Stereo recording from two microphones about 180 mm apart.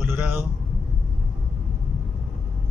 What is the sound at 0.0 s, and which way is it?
Vehicle, 10° right (ahead or behind).